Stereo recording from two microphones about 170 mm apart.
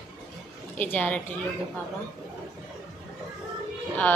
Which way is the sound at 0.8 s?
10° left (ahead or behind).